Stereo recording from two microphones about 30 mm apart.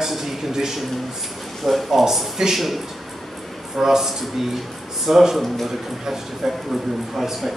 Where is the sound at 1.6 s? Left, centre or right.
Centre.